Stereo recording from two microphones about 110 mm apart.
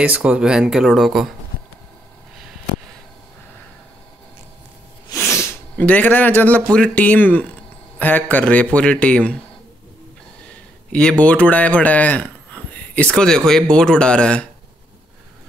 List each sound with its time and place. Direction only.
0.0 s speech: 10° right (ahead or behind)
5.1 s speech: 25° left (ahead or behind)
10.9 s speech: 10° left (ahead or behind)